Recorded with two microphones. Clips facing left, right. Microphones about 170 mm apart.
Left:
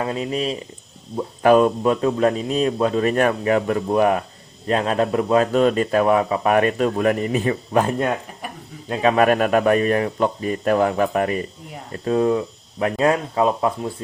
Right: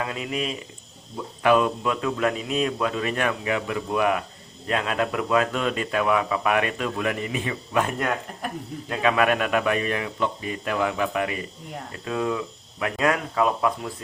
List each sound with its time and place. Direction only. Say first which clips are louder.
0.0 s speech: left 5 dB; 35° left (ahead or behind)